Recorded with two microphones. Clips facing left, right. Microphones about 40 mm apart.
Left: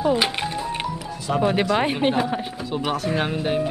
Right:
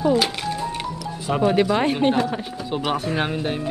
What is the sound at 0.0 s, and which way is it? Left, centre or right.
Music, left.